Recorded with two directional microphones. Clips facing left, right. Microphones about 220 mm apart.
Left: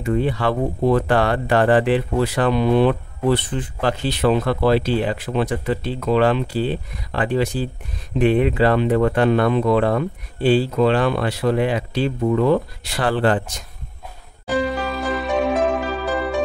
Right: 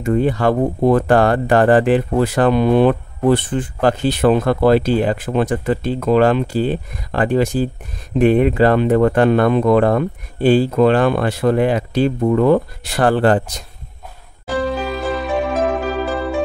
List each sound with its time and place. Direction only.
0.0 s speech: 45° right (ahead or behind)
14.8 s music: centre (ahead or behind)